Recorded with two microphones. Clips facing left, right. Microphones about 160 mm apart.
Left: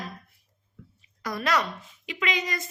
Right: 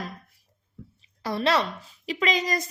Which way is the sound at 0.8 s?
30° right (ahead or behind).